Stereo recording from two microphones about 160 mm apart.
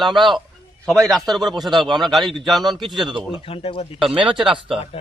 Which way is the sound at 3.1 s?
30° right (ahead or behind).